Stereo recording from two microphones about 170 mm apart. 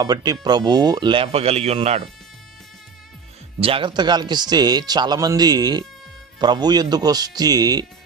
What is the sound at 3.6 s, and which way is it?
Speech, 30° right (ahead or behind).